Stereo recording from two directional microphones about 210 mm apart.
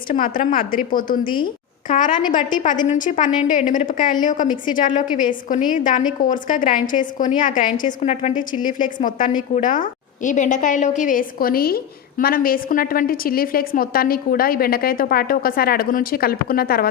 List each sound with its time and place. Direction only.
0.1 s a woman's voice: 40° left (ahead or behind)